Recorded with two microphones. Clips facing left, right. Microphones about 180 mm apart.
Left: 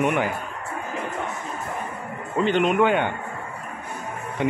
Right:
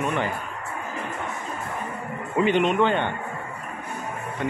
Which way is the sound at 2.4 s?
Centre (ahead or behind).